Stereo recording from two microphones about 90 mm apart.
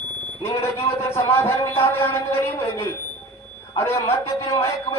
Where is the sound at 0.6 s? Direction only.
30° left (ahead or behind).